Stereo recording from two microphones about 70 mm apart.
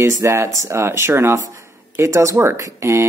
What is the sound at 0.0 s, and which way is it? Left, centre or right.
Speech, right.